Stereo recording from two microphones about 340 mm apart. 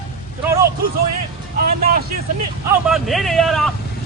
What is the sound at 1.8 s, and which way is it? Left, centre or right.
Speech, right.